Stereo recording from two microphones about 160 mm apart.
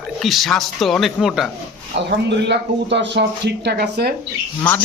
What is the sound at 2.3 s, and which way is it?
Speech, 90° right.